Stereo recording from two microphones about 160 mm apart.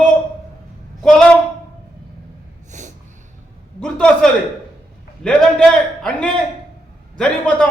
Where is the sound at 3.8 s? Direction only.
5° left (ahead or behind).